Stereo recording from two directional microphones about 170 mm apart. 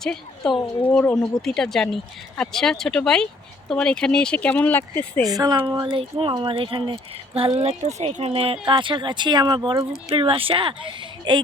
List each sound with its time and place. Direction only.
0.0 s speech: 5° left (ahead or behind)
5.3 s speech: 25° right (ahead or behind)